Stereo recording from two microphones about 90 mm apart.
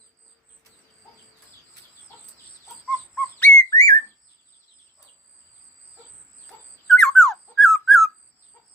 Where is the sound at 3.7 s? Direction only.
40° left (ahead or behind).